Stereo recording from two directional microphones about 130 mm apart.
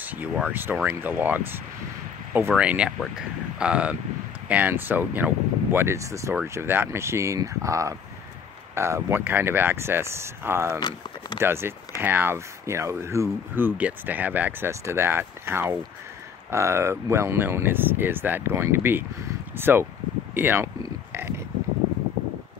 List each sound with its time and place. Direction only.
0.0 s speech: 15° right (ahead or behind)